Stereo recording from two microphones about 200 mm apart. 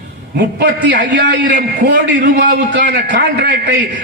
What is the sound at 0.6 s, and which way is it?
A man's voice, 55° right (ahead or behind).